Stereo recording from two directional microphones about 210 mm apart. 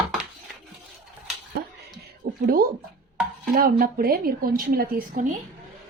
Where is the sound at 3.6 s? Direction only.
40° right (ahead or behind).